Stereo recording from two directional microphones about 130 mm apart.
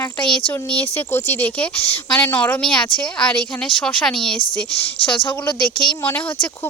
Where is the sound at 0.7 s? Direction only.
15° left (ahead or behind).